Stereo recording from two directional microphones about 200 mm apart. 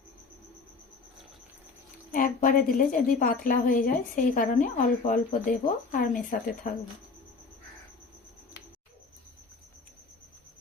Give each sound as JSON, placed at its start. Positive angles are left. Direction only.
{"t": 2.1, "sound": "a woman's voice", "side_deg": 45}